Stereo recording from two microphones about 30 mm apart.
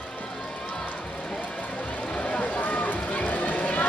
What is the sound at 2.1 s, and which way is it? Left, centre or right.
Run, left.